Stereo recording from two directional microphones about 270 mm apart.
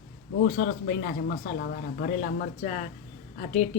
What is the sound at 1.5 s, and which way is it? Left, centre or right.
A woman's voice, left.